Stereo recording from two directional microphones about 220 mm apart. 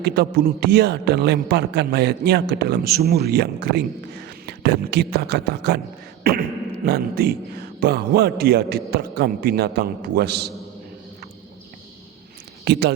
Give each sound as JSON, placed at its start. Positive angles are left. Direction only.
{"t": 0.0, "sound": "a man's voice", "side_deg": -45}
{"t": 12.6, "sound": "speech", "side_deg": -45}